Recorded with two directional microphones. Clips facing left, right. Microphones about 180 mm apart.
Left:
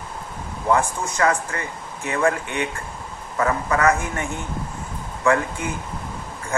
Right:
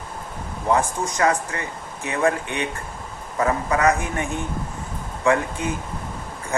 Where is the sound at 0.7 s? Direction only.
15° right (ahead or behind).